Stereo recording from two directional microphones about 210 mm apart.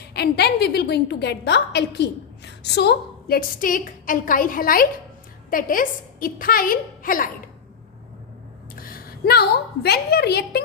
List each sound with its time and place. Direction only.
0.1 s a woman's voice: 50° left (ahead or behind)
8.8 s a woman's voice: 45° left (ahead or behind)